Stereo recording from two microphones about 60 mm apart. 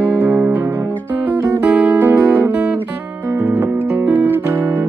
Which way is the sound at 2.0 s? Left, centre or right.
Right.